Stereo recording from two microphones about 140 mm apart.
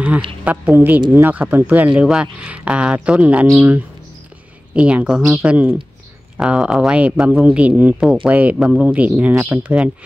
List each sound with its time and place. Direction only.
0.5 s speech: 10° right (ahead or behind)
4.7 s speech: 10° right (ahead or behind)